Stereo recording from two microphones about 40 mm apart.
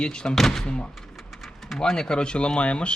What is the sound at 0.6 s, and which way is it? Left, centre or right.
Speech, left.